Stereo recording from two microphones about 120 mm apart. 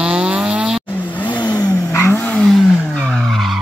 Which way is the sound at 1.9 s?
20° left (ahead or behind).